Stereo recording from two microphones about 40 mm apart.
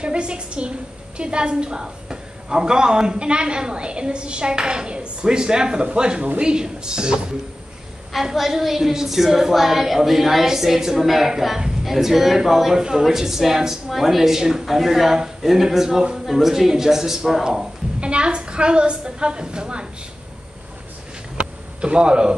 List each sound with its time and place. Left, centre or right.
0.0 s a woman's voice: right
8.1 s a woman's voice: centre
17.5 s a woman's voice: right
21.4 s a sound: right